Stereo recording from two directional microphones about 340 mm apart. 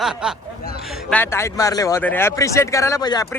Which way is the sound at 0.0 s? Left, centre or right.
Centre.